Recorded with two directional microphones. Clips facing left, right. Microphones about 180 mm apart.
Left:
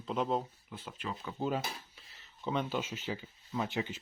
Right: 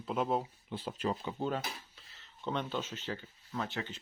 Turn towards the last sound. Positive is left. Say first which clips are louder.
# left 3 dB
turn(degrees=10)  # may be behind; listen again after turning